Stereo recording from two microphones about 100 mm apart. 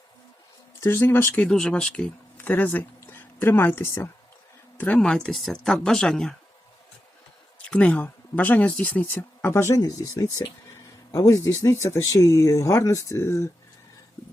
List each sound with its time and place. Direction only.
0.8 s speech: 25° left (ahead or behind)
1.5 s speech: 5° left (ahead or behind); by 4.1 s 25° left (ahead or behind)
4.9 s speech: 5° left (ahead or behind)
7.6 s speech: 10° left (ahead or behind)